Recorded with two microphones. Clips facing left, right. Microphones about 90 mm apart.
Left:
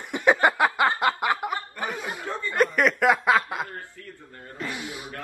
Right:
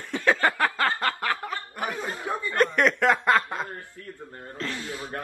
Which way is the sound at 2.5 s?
5° left (ahead or behind).